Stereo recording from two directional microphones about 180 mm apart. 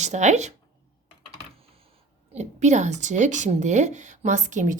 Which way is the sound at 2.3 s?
40° right (ahead or behind).